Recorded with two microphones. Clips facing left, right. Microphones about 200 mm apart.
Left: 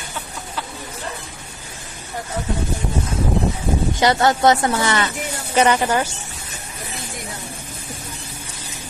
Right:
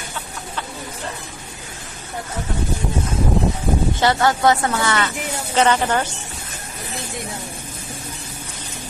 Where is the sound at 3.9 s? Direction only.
20° left (ahead or behind).